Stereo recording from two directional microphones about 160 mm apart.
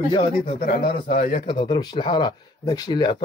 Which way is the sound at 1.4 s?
30° left (ahead or behind).